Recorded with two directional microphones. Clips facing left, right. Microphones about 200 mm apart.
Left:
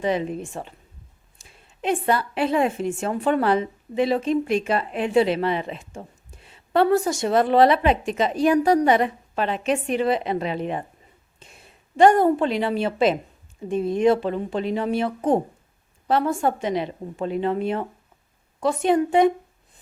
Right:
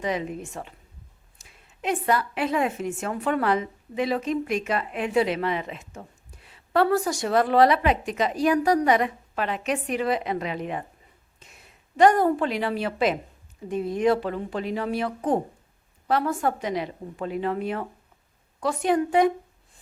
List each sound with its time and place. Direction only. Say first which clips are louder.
0.0 s a woman's voice: left 4 dB; 30° left (ahead or behind)